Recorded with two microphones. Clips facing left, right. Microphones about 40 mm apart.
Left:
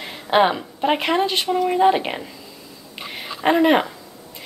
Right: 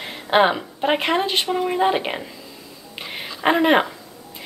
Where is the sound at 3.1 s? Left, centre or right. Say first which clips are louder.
Left 1 dB; centre.